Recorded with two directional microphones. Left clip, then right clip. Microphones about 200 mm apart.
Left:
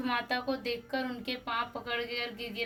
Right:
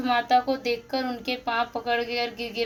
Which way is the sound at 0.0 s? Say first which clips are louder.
Right 10 dB; 25° left (ahead or behind).